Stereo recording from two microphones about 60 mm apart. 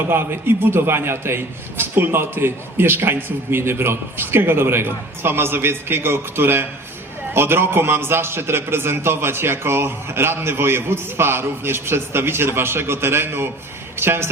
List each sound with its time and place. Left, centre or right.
0.1 s a man's voice: right